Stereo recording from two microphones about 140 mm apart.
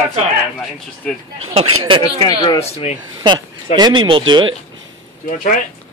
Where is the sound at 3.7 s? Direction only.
30° right (ahead or behind).